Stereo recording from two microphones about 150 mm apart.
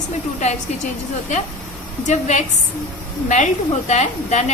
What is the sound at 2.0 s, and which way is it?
A woman's voice, 50° left (ahead or behind).